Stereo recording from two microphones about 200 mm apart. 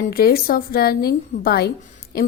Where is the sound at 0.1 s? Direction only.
50° left (ahead or behind).